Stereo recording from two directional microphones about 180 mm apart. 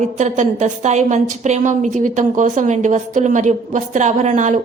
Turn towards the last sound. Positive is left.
turn(degrees=-40)  # may be behind; listen again after turning